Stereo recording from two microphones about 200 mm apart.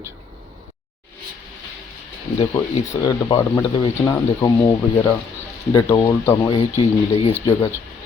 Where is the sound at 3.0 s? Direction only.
20° left (ahead or behind).